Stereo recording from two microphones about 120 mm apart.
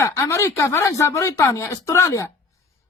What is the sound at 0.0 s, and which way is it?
Speech, 25° left (ahead or behind).